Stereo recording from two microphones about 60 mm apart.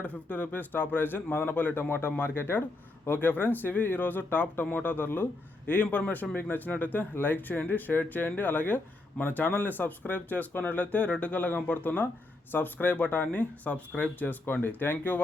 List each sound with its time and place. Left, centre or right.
0.0 s speech: left